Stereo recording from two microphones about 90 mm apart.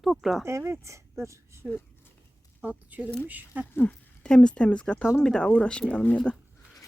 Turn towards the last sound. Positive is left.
turn(degrees=15)  # may be behind; listen again after turning